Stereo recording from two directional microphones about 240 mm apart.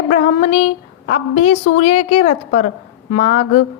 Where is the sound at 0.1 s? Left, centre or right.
Left.